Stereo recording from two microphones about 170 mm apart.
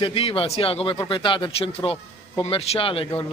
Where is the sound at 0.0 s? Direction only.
35° left (ahead or behind).